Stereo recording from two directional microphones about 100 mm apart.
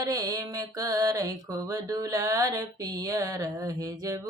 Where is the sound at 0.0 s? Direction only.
35° right (ahead or behind).